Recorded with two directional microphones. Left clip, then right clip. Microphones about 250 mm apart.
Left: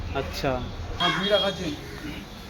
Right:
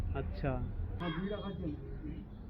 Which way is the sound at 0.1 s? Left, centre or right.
Centre.